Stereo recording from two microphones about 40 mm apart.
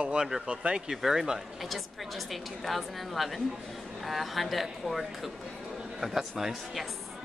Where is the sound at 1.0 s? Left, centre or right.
Centre.